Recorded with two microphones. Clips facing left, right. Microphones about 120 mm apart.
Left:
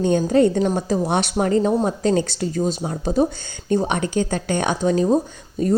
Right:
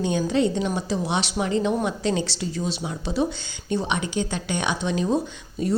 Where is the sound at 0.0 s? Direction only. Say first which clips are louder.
Left 6 dB; 45° left (ahead or behind).